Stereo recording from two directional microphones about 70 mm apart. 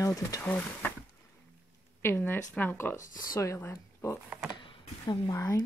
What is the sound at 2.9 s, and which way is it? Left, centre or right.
Speech, left.